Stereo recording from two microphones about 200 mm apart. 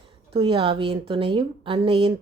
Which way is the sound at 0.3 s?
25° right (ahead or behind).